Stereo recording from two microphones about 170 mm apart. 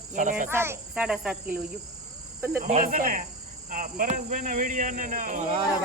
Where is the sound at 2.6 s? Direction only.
50° right (ahead or behind).